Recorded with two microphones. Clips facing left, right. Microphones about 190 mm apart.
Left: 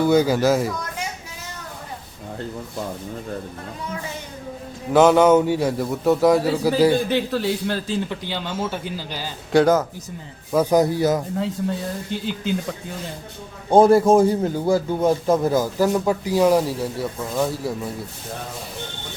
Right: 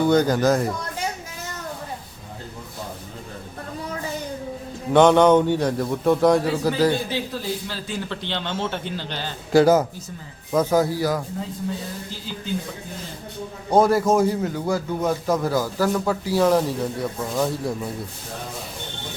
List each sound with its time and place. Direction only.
0.0 s a man's voice: 10° left (ahead or behind)
4.9 s a man's voice: 5° left (ahead or behind)
7.1 s a man's voice: 60° left (ahead or behind)
8.1 s a man's voice: 10° left (ahead or behind)
10.5 s a man's voice: 15° left (ahead or behind)
13.7 s a man's voice: 30° left (ahead or behind); by 17.7 s centre (ahead or behind)